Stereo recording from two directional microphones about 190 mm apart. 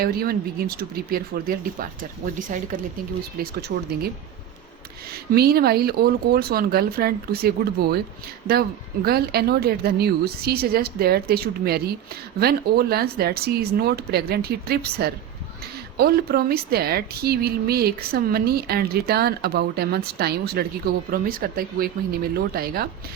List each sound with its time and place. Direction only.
0.0 s speech: 55° right (ahead or behind)
3.7 s a woman's voice: 60° right (ahead or behind)
5.3 s speech: 55° right (ahead or behind)
9.0 s a woman's voice: 55° right (ahead or behind)